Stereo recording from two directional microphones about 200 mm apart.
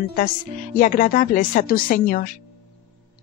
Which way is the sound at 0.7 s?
40° left (ahead or behind).